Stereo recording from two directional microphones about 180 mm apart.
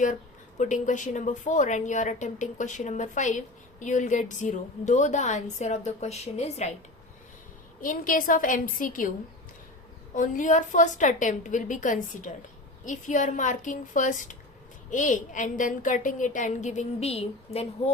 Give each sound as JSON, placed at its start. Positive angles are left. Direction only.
{"t": 0.6, "sound": "a woman's voice", "side_deg": 45}
{"t": 7.8, "sound": "a woman's voice", "side_deg": 50}
{"t": 10.2, "sound": "a woman's voice", "side_deg": 45}